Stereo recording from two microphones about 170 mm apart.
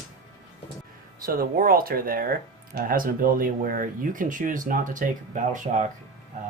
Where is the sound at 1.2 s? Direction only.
60° right (ahead or behind).